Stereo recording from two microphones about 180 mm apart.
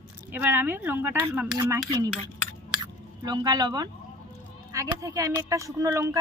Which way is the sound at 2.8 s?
25° right (ahead or behind).